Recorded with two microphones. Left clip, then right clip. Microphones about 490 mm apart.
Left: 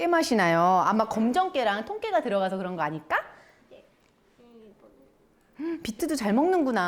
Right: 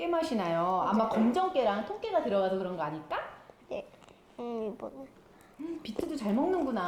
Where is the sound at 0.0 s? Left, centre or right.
Left.